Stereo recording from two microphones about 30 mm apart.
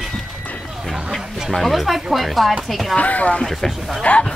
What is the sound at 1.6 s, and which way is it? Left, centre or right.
Speech, centre.